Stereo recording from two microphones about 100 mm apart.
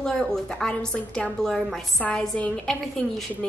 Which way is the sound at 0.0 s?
5° left (ahead or behind).